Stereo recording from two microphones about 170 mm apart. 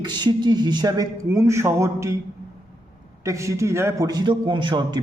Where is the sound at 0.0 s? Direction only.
25° right (ahead or behind).